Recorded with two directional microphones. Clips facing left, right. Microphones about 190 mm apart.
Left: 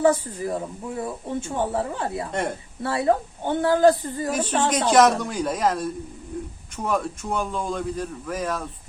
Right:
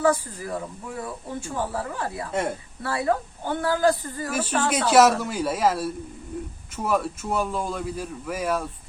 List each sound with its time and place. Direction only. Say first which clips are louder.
0.0 s speech: left 3 dB; 25° left (ahead or behind)
4.7 s a man's voice: even; 5° right (ahead or behind)